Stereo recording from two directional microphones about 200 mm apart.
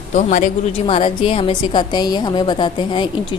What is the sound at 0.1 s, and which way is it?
A woman's voice, 40° left (ahead or behind).